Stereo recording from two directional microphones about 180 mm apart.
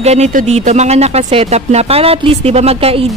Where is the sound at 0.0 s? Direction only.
40° right (ahead or behind).